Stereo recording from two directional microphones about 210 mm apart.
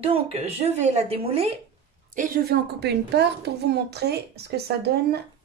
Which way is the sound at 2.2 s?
45° right (ahead or behind).